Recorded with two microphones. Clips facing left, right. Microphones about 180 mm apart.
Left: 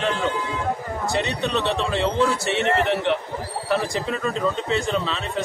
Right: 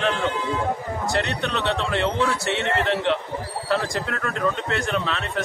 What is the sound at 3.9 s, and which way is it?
Speech, 75° right (ahead or behind).